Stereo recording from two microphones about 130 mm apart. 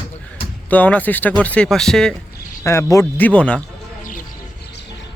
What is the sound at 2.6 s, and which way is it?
Speech, 20° left (ahead or behind).